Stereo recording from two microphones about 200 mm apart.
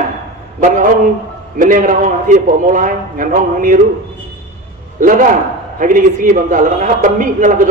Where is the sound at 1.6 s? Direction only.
40° right (ahead or behind).